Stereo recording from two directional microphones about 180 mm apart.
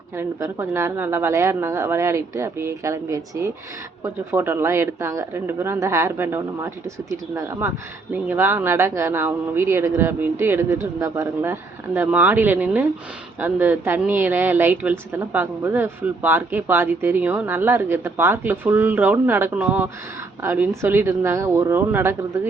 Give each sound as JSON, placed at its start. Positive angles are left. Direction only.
{"t": 0.2, "sound": "a woman's voice", "side_deg": -15}